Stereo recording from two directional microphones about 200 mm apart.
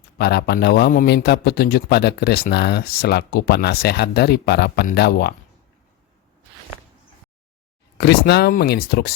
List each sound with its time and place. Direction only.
0.2 s a man's voice: 55° left (ahead or behind)
7.9 s a man's voice: 55° left (ahead or behind)